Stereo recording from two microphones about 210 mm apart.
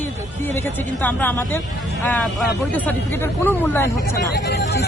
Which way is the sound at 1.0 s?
10° left (ahead or behind).